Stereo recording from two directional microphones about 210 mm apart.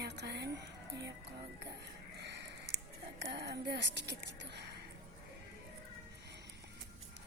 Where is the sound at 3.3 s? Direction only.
50° right (ahead or behind).